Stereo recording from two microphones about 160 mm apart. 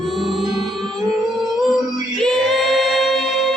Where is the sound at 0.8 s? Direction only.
30° right (ahead or behind).